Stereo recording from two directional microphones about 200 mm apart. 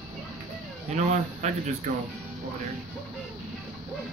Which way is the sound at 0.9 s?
35° right (ahead or behind).